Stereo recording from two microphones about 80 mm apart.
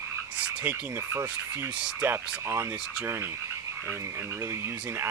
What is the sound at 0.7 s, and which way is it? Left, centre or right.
Speech, right.